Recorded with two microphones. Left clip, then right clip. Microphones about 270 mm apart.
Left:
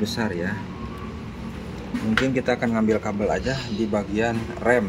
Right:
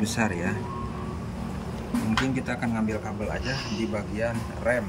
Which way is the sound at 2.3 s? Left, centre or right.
Centre.